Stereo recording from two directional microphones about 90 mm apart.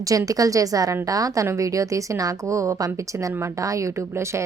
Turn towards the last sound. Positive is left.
turn(degrees=-30)  # may be behind; listen again after turning